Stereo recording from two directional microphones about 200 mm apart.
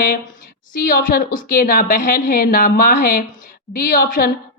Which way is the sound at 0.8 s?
50° left (ahead or behind).